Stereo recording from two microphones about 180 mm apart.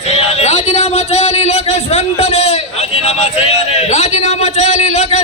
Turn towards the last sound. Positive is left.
turn(degrees=40)  # may be behind; listen again after turning